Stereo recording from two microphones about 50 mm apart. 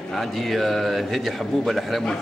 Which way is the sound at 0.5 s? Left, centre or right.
Centre.